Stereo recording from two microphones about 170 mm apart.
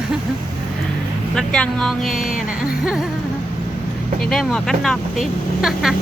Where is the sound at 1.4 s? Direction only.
5° left (ahead or behind).